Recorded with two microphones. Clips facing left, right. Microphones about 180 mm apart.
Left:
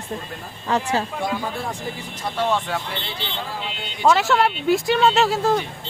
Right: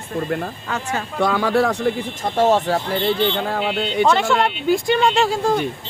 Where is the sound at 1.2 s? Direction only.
80° right.